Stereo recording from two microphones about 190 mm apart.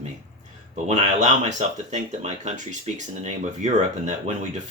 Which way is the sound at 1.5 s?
40° right (ahead or behind).